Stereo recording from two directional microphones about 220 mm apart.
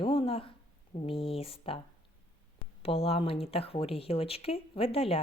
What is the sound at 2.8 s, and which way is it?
A woman's voice, 25° left (ahead or behind).